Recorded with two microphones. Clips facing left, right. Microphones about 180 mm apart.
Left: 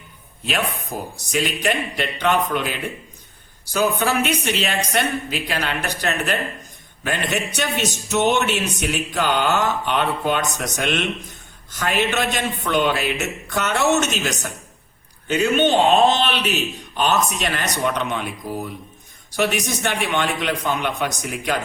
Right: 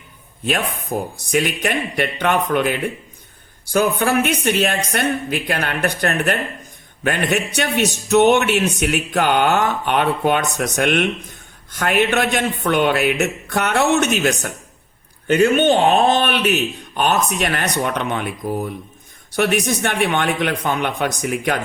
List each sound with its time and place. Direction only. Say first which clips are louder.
0.4 s speech: right 3 dB; 50° right (ahead or behind)